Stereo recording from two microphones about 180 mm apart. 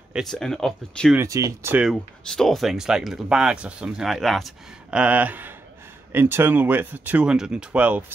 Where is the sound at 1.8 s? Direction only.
Centre (ahead or behind).